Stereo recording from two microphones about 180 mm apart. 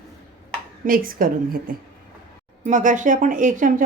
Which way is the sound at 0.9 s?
55° right (ahead or behind).